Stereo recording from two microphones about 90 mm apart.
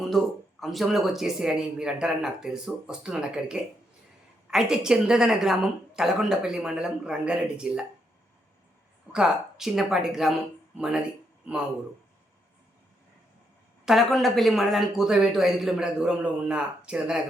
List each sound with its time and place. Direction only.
0.6 s a woman's voice: centre (ahead or behind)
9.1 s a woman's voice: 5° right (ahead or behind)
13.8 s speech: centre (ahead or behind)